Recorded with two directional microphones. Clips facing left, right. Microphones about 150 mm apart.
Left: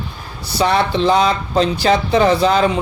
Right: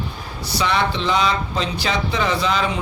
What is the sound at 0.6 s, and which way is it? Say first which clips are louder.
A man's voice: left 6 dB; 40° left (ahead or behind).